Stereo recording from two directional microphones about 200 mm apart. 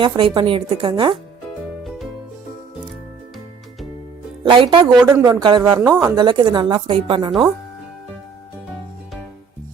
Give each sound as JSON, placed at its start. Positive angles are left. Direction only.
{"t": 0.0, "sound": "a woman's voice", "side_deg": -25}
{"t": 4.4, "sound": "a woman's voice", "side_deg": -25}
{"t": 4.9, "sound": "a woman's voice", "side_deg": -5}
{"t": 5.2, "sound": "a woman's voice", "side_deg": -20}